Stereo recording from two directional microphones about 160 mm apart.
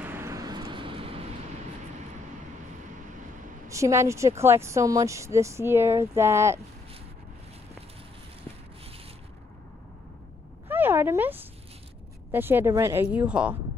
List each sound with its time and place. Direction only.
0.0 s vehicle: 15° right (ahead or behind); by 1.2 s 35° right (ahead or behind)
3.6 s a woman's voice: 20° right (ahead or behind)
10.7 s a sound: 15° right (ahead or behind)
12.3 s a woman's voice: 15° right (ahead or behind)